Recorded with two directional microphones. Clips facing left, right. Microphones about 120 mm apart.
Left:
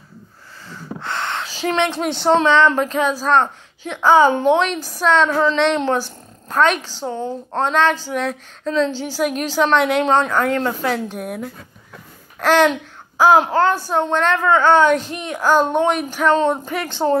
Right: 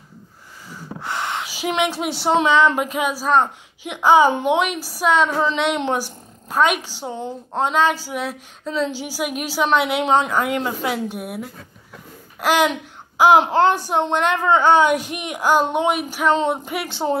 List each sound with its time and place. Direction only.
0.7 s a woman's voice: 10° right (ahead or behind)